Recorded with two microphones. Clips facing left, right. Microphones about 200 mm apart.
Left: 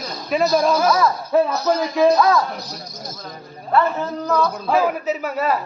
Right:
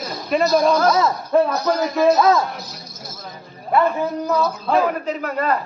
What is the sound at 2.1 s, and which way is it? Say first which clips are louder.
Speech: right 1 dB; 25° right (ahead or behind).